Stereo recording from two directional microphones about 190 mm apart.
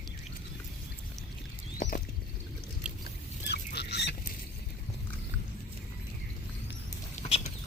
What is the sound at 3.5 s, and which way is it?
Goose, 60° left (ahead or behind).